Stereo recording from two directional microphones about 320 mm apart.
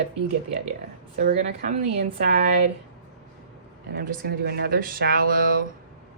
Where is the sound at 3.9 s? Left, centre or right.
Right.